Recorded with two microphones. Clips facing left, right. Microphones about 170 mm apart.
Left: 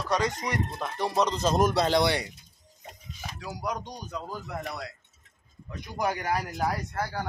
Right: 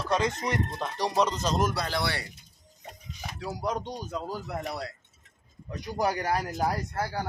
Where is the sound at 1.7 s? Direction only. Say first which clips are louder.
Left 7 dB; 25° left (ahead or behind).